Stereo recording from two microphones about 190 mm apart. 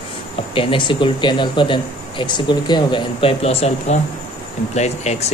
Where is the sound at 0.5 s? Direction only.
25° left (ahead or behind).